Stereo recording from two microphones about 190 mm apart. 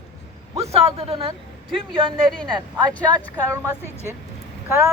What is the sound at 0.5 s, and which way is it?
Speech, 30° right (ahead or behind).